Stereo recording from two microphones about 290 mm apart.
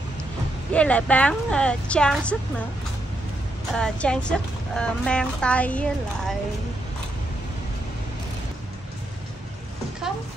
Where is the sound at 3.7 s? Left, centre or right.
Centre.